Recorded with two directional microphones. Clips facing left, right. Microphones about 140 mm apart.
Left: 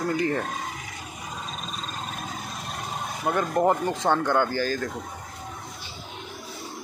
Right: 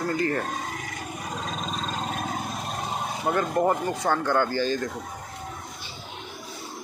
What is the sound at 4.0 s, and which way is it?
Speech, 15° left (ahead or behind).